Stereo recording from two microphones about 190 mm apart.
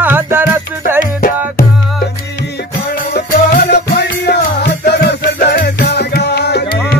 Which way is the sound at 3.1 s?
55° left (ahead or behind).